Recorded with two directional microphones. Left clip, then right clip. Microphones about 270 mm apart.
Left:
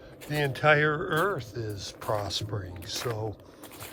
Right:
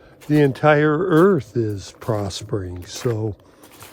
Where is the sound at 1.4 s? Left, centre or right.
Right.